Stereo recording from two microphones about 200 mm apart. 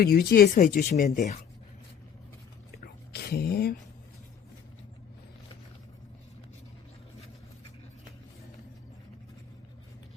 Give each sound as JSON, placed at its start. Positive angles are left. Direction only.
{"t": 0.0, "sound": "speech", "side_deg": 50}
{"t": 1.0, "sound": "speech", "side_deg": 35}
{"t": 2.7, "sound": "whispering", "side_deg": 50}